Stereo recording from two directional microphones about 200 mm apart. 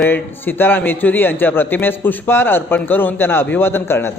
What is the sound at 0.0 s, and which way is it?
A man's voice, 10° left (ahead or behind).